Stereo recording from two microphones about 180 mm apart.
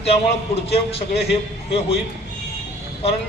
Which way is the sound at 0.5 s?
35° left (ahead or behind).